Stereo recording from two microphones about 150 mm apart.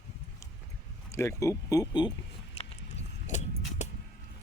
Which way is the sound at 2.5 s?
50° left (ahead or behind).